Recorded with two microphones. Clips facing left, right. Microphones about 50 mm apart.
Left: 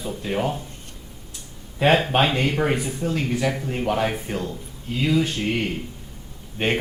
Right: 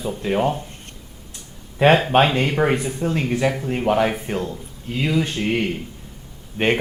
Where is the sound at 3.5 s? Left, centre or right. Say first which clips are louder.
Right 4 dB; centre.